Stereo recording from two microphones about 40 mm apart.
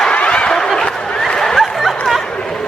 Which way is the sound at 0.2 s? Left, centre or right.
Left.